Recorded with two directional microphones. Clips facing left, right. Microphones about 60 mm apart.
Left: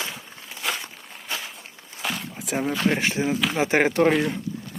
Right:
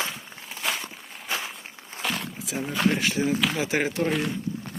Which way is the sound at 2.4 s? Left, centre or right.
Left.